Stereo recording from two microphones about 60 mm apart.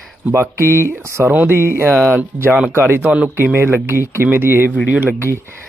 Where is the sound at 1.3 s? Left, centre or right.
Right.